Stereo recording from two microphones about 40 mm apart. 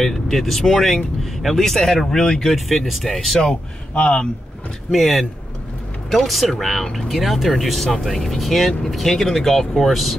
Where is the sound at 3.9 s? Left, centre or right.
Left.